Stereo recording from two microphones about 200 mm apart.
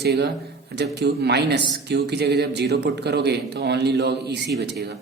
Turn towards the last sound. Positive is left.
turn(degrees=-55)  # may be behind; listen again after turning